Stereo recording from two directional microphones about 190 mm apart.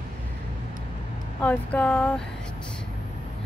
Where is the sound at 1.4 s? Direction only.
10° left (ahead or behind).